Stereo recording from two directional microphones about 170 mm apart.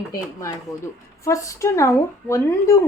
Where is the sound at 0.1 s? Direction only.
20° left (ahead or behind).